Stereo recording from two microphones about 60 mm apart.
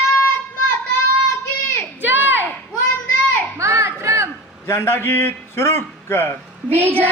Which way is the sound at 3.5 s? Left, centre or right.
Right.